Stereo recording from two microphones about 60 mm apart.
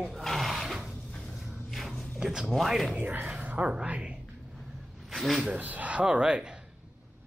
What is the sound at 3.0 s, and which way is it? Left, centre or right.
Speech, right.